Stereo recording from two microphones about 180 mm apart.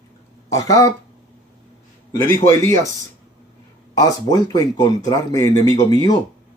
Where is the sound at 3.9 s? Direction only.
20° left (ahead or behind).